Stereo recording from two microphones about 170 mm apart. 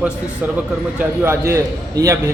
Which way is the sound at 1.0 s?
15° right (ahead or behind).